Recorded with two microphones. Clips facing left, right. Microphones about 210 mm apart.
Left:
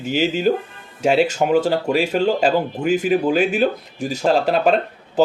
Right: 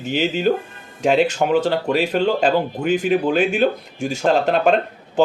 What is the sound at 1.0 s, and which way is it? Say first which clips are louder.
Speech: even; 5° left (ahead or behind).